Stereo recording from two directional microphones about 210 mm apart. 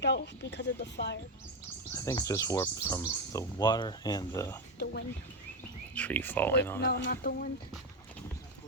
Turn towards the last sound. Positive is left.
turn(degrees=50)  # may be behind; listen again after turning